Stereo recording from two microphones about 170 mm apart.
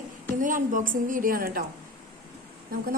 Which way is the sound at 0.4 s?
50° right (ahead or behind).